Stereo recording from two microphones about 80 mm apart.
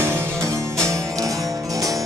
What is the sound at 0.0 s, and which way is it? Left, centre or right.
Music, right.